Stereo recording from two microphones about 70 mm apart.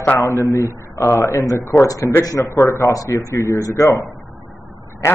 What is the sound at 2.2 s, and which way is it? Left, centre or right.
Speech, left.